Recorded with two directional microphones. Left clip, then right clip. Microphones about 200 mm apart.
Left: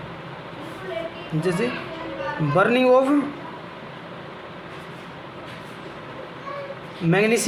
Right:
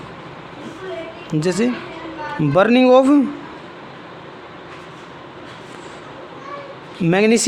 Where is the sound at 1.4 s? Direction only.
55° right (ahead or behind).